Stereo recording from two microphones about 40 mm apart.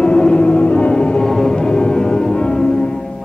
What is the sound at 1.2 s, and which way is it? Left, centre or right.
Music, centre.